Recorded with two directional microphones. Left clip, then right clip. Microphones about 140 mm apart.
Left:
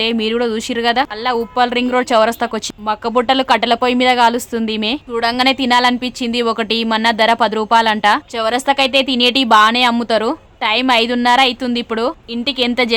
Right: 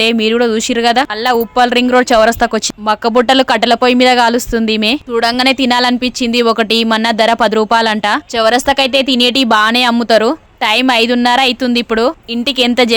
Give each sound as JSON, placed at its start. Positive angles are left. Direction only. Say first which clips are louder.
{"t": 0.0, "sound": "speech", "louder": "right 5 dB", "side_deg": -35}